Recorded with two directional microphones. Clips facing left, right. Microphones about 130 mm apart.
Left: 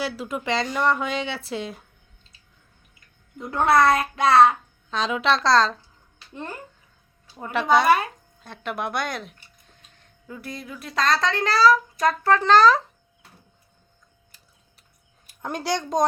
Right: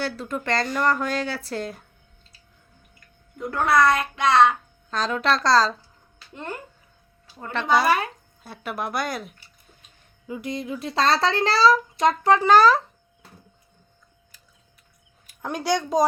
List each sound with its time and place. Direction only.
0.0 s a woman's voice: 5° left (ahead or behind)
3.5 s a child's voice: 25° left (ahead or behind)
4.9 s a woman's voice: centre (ahead or behind)
7.3 s a woman's voice: 10° left (ahead or behind); by 12.8 s 10° right (ahead or behind)
15.4 s a woman's voice: centre (ahead or behind)